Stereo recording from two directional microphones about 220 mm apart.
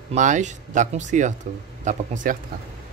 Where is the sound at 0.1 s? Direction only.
35° right (ahead or behind).